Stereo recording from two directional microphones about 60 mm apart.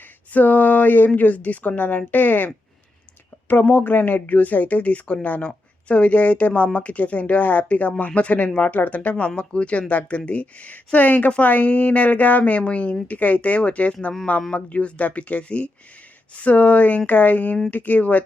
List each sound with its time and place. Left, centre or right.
0.3 s speech: left
3.5 s speech: left